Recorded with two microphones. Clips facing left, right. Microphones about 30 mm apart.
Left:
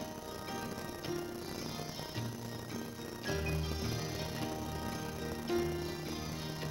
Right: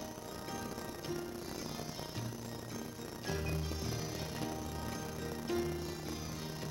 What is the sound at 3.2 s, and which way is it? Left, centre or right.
Music, centre.